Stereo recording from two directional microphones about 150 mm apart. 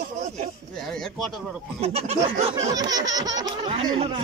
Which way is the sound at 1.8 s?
40° right (ahead or behind).